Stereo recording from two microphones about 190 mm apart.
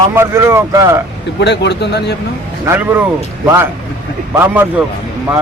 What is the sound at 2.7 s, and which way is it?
Speech, 10° right (ahead or behind).